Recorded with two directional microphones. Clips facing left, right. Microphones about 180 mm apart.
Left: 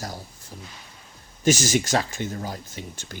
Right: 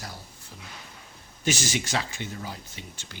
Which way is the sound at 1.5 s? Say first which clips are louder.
Left 7 dB; 45° left (ahead or behind).